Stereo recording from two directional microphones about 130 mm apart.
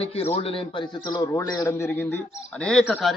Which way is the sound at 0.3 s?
45° left (ahead or behind).